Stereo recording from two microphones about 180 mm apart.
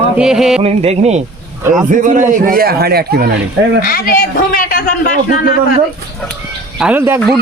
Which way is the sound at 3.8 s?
50° left (ahead or behind).